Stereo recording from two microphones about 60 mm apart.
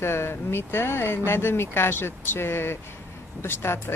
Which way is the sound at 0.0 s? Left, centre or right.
Left.